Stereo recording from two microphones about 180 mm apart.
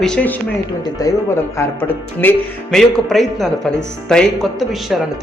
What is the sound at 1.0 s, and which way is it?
Speech, 20° left (ahead or behind).